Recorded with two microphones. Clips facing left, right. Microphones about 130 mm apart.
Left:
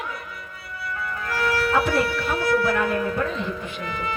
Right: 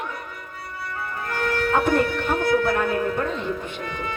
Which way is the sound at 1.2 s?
50° right (ahead or behind).